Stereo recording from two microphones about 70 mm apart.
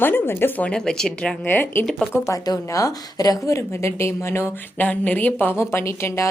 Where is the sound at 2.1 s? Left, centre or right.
Left.